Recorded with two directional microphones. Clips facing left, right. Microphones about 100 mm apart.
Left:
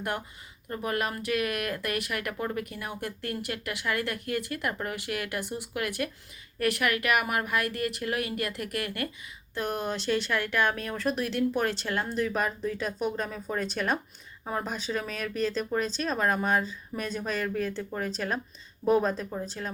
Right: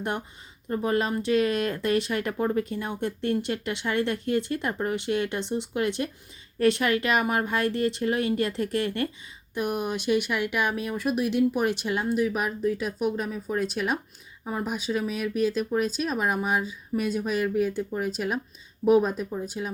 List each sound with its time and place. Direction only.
0.7 s speech: 25° right (ahead or behind)
9.6 s speech: 15° right (ahead or behind)